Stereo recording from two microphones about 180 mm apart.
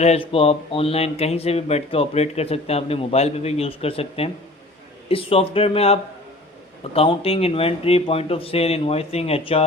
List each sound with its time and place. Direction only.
0.0 s speech: 35° left (ahead or behind)